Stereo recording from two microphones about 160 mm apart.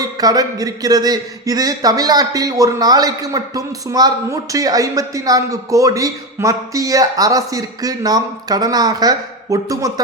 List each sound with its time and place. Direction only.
0.0 s a man's voice: 25° right (ahead or behind)